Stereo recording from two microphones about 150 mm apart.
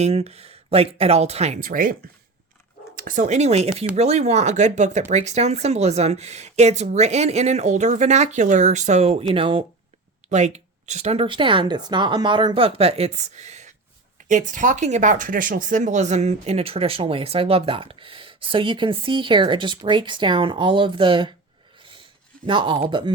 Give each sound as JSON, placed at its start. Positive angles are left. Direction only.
{"t": 0.0, "sound": "speech", "side_deg": -40}
{"t": 1.5, "sound": "speech", "side_deg": -65}
{"t": 10.2, "sound": "speech", "side_deg": -50}
{"t": 22.4, "sound": "speech", "side_deg": -35}